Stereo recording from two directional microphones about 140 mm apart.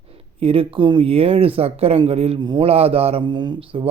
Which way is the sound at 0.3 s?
45° right (ahead or behind).